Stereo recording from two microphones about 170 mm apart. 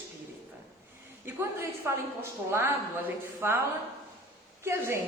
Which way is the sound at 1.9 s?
15° right (ahead or behind).